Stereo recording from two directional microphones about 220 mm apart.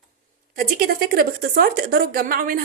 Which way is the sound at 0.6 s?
40° right (ahead or behind).